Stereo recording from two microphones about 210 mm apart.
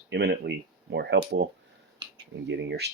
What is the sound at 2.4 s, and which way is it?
Speech, 55° right (ahead or behind).